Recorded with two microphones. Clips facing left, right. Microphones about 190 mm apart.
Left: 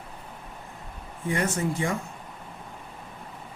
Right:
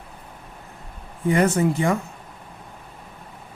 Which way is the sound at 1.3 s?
65° right (ahead or behind).